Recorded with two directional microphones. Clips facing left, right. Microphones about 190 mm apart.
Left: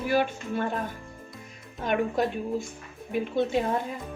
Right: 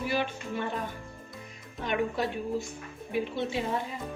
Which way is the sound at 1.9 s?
50° left (ahead or behind).